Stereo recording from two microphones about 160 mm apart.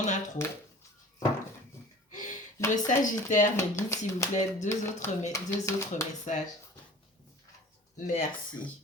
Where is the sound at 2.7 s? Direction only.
50° left (ahead or behind).